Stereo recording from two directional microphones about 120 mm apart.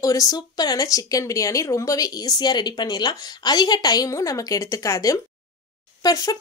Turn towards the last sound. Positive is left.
turn(degrees=30)  # may be behind; listen again after turning